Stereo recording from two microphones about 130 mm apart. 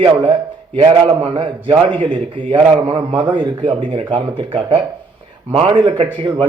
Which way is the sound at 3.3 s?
35° right (ahead or behind).